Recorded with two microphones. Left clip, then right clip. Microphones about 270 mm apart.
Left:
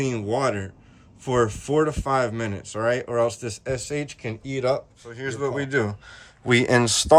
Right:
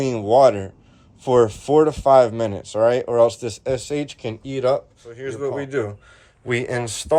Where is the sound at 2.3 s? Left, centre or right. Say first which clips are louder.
Right 6 dB; right.